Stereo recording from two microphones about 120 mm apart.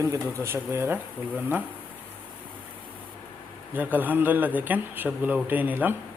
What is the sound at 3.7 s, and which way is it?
Speech, 15° right (ahead or behind).